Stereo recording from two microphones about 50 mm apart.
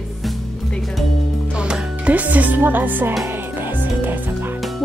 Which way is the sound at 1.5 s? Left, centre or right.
Centre.